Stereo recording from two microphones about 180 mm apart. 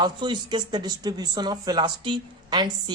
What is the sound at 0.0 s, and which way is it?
A woman's voice, 25° right (ahead or behind).